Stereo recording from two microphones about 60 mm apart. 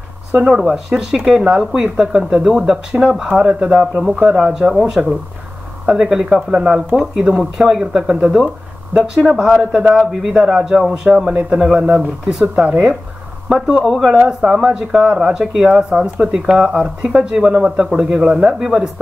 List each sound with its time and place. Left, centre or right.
0.5 s speech: centre
13.5 s speech: centre